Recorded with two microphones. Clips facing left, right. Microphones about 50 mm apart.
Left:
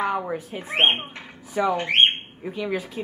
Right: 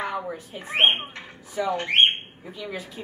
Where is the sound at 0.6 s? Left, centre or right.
Centre.